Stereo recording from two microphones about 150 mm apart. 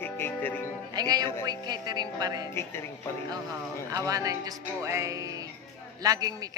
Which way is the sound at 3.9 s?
25° right (ahead or behind).